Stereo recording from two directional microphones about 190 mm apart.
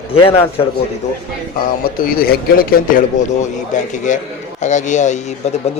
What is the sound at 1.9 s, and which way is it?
Speech, 50° left (ahead or behind).